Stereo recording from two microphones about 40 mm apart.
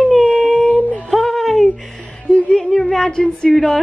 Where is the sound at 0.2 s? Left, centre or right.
Centre.